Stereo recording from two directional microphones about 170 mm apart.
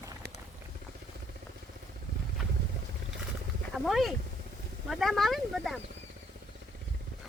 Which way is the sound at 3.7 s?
Centre (ahead or behind).